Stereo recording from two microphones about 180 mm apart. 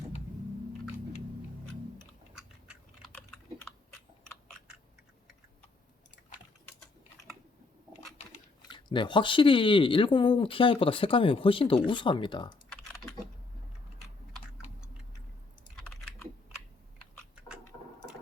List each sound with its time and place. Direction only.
2.3 s chewing: centre (ahead or behind)
8.7 s speech: 25° left (ahead or behind)
12.7 s typing: 5° left (ahead or behind)